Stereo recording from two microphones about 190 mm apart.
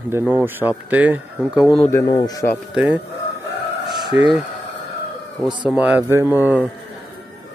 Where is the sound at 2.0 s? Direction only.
20° left (ahead or behind).